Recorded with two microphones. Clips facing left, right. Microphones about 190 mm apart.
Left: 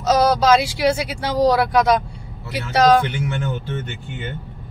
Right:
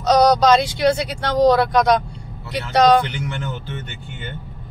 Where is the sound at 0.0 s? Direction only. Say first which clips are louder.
Right 2 dB; 5° left (ahead or behind).